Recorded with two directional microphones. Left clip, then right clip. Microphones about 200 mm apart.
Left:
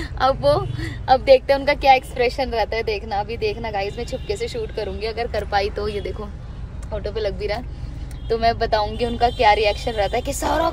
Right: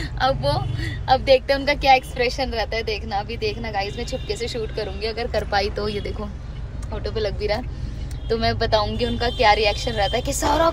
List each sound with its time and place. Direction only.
0.0 s speech: 35° left (ahead or behind); by 10.7 s 20° left (ahead or behind)